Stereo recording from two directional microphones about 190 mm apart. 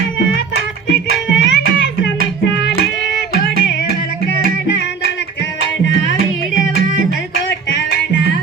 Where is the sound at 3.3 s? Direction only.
60° left (ahead or behind).